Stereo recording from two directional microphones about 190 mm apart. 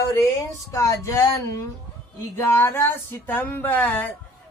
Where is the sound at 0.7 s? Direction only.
15° left (ahead or behind).